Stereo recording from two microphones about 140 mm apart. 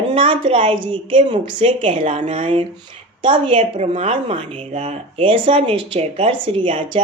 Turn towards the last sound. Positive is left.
turn(degrees=-40)  # may be behind; listen again after turning